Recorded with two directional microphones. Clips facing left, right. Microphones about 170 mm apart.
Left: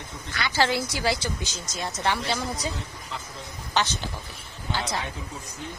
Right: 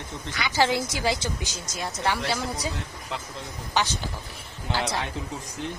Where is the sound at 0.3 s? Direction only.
15° right (ahead or behind).